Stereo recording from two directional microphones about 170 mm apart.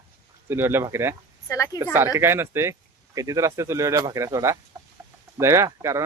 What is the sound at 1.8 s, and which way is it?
Speech, 15° right (ahead or behind).